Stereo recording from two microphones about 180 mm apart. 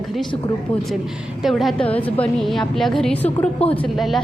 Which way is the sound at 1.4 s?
Centre (ahead or behind).